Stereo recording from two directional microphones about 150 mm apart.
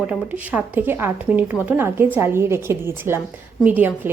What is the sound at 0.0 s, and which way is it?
Speech, 10° right (ahead or behind).